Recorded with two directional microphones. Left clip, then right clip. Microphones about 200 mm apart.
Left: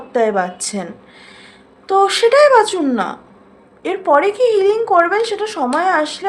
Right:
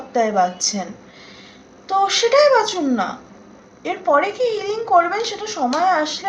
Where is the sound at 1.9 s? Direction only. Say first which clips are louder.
Left 4 dB; 50° left (ahead or behind).